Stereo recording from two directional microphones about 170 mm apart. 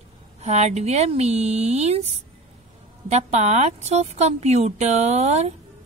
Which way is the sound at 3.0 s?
40° right (ahead or behind).